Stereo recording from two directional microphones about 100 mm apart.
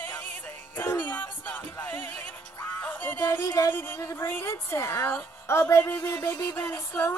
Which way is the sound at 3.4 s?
30° left (ahead or behind).